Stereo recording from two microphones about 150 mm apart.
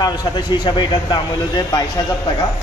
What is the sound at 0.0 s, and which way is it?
A man's voice, 30° left (ahead or behind).